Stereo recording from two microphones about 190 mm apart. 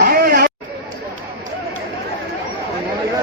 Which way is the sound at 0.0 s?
55° right (ahead or behind).